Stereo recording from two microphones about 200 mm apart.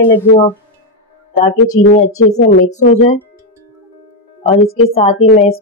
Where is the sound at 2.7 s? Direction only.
35° left (ahead or behind).